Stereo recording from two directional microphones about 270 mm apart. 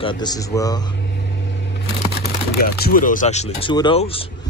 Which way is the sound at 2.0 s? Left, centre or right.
Left.